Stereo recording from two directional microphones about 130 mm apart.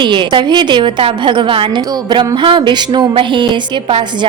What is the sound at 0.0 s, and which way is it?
A woman's voice, 40° right (ahead or behind).